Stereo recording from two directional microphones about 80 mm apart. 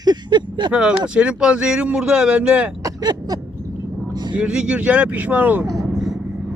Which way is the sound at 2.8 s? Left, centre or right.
Right.